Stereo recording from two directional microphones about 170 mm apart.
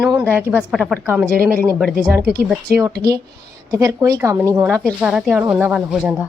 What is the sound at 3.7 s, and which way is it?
A woman's voice, 20° right (ahead or behind).